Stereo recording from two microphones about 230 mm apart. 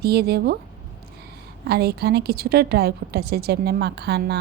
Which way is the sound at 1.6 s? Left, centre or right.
Right.